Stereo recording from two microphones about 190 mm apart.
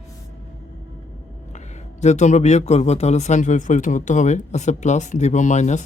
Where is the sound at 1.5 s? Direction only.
40° left (ahead or behind).